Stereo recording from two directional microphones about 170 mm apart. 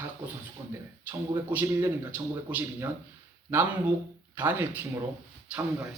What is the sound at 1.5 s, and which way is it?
Speech, 10° right (ahead or behind).